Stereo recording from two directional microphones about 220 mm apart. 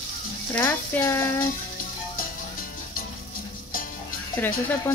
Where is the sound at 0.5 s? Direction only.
5° left (ahead or behind).